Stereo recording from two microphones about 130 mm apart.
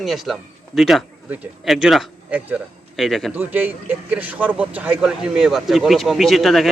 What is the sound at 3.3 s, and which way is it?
Speech, 15° right (ahead or behind).